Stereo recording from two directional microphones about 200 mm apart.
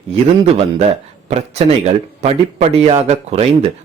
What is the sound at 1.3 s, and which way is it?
Speech, 30° right (ahead or behind).